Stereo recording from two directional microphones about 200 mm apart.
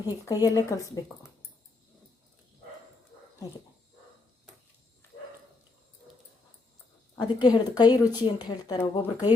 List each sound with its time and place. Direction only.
0.0 s speech: 20° left (ahead or behind)
7.4 s speech: 20° left (ahead or behind)